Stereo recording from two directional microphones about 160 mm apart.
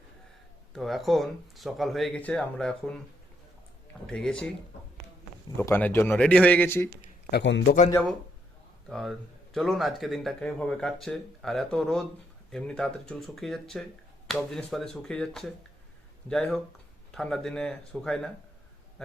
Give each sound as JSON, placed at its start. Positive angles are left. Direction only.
{"t": 0.7, "sound": "speech", "side_deg": 0}
{"t": 4.0, "sound": "speech", "side_deg": 5}
{"t": 5.5, "sound": "speech", "side_deg": 15}
{"t": 7.3, "sound": "a man's voice", "side_deg": 90}
{"t": 8.9, "sound": "speech", "side_deg": 0}